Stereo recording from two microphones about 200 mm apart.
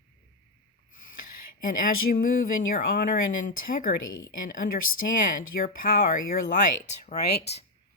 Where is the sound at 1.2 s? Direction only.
45° left (ahead or behind).